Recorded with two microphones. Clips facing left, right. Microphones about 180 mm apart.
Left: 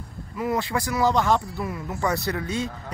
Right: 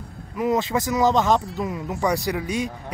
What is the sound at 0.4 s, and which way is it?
Speech, 20° right (ahead or behind).